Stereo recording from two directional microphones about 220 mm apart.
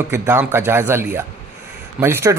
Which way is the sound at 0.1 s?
10° right (ahead or behind).